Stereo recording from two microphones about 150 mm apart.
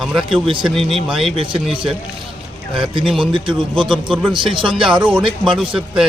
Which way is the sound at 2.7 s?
35° right (ahead or behind).